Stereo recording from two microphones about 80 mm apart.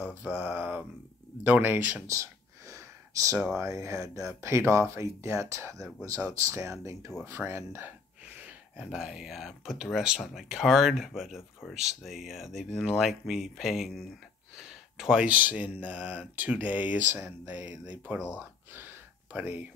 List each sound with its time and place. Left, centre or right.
0.0 s speech: centre
2.7 s a sound: right
3.5 s speech: right
8.3 s speech: centre
18.4 s gasp: right